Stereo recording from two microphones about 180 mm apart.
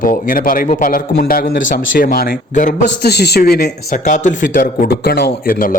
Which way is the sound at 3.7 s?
40° left (ahead or behind).